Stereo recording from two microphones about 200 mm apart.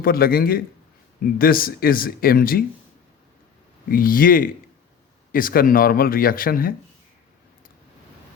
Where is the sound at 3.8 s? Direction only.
45° left (ahead or behind).